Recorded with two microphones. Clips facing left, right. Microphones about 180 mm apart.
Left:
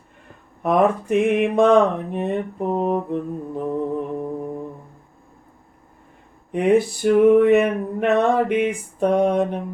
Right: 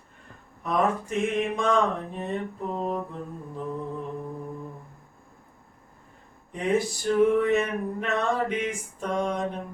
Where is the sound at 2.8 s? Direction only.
65° left (ahead or behind).